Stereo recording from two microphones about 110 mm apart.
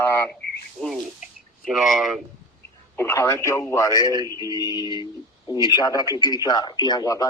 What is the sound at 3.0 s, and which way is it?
Speech, 25° left (ahead or behind).